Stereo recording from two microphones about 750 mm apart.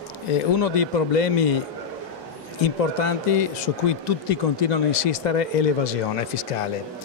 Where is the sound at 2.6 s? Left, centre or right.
Left.